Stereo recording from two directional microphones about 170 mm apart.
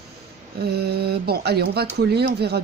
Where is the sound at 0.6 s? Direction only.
70° right (ahead or behind).